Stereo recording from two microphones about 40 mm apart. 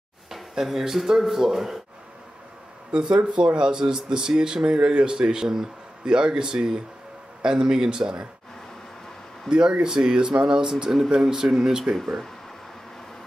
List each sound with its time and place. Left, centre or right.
0.3 s speech: centre
2.9 s speech: right
9.5 s speech: right